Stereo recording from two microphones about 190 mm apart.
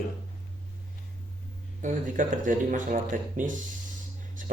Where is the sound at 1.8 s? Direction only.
45° right (ahead or behind).